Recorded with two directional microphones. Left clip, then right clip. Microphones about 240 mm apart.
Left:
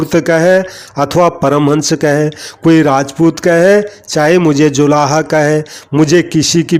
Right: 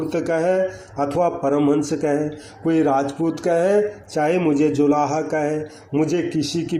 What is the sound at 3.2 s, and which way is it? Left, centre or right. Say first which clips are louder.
Speech: left 10 dB; left.